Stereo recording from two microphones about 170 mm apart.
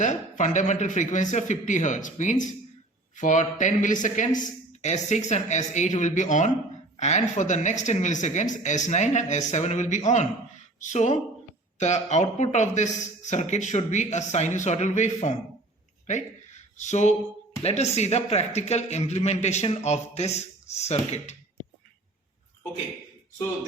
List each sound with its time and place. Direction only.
0.0 s a man's voice: 45° left (ahead or behind)
16.0 s a sound: 45° left (ahead or behind)
17.6 s a man's voice: 40° left (ahead or behind)